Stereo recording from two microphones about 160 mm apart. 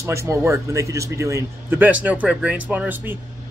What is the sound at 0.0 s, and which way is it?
A man's voice, 20° right (ahead or behind).